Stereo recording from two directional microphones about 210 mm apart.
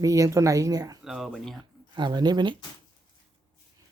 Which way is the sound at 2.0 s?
20° right (ahead or behind).